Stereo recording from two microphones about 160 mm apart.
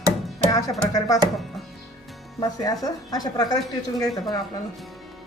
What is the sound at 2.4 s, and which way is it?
Speech, 25° left (ahead or behind).